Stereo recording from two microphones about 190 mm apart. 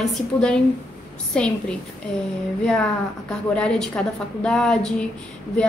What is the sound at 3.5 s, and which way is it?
A woman's voice, 5° left (ahead or behind).